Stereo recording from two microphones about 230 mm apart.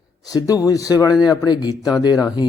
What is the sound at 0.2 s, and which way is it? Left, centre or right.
Speech, centre.